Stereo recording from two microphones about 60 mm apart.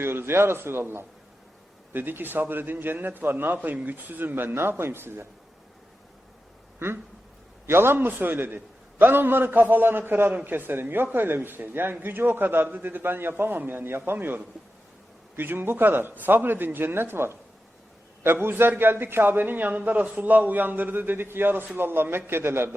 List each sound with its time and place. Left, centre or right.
0.0 s a man's voice: right
6.7 s a sound: right
7.7 s a man's voice: right